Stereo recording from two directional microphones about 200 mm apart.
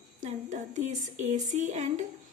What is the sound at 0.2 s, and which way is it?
A woman's voice, 35° right (ahead or behind).